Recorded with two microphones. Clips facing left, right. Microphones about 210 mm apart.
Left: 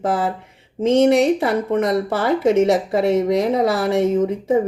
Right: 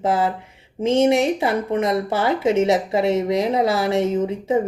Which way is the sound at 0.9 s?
60° left (ahead or behind).